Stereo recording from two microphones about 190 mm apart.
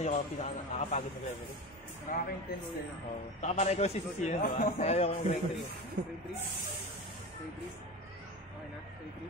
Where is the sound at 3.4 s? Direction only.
35° left (ahead or behind).